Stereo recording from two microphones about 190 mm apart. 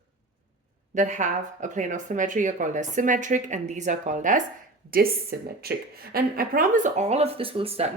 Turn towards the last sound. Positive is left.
turn(degrees=-30)  # may be behind; listen again after turning